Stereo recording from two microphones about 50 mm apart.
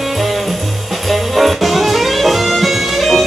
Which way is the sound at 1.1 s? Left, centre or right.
Centre.